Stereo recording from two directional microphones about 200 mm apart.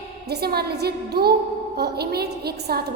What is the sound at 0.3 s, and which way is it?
A woman's voice, 50° right (ahead or behind).